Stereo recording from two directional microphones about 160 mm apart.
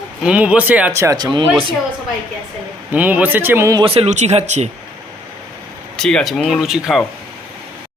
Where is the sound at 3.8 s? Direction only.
40° right (ahead or behind).